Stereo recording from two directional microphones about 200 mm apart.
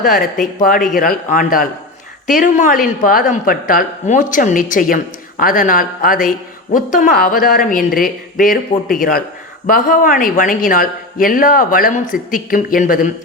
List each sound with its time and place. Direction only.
0.6 s a woman's voice: 45° left (ahead or behind)